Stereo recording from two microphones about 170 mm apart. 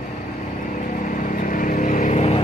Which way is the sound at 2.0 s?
40° left (ahead or behind).